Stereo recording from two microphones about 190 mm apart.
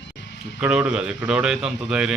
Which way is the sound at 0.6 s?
5° right (ahead or behind).